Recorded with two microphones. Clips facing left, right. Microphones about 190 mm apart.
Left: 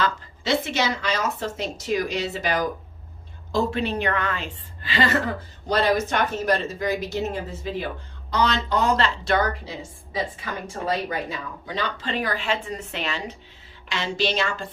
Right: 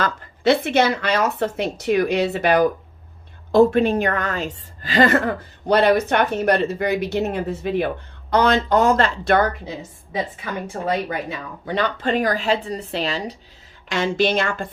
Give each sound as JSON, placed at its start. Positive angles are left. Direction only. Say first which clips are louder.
{"t": 0.0, "sound": "a woman's voice", "louder": "right 6 dB", "side_deg": -55}
{"t": 11.6, "sound": "speech", "louder": "right 8 dB", "side_deg": -55}
{"t": 13.9, "sound": "speech", "louder": "right 6 dB", "side_deg": -50}